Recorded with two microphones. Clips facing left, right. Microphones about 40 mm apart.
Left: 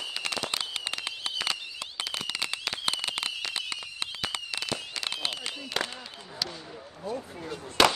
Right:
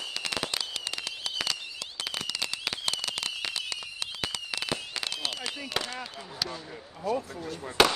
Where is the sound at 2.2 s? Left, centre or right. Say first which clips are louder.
Left 1 dB; left.